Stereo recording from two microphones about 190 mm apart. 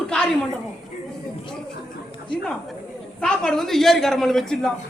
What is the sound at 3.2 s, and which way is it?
A man's voice, 5° left (ahead or behind).